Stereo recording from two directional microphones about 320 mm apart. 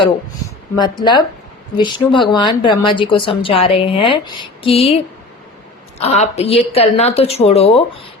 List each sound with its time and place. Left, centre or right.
0.8 s a woman's voice: centre